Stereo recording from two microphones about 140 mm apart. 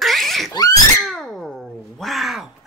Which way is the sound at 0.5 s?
25° left (ahead or behind).